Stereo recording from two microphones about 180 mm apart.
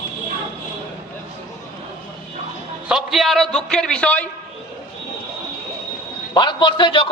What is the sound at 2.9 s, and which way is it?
A man's voice, centre (ahead or behind).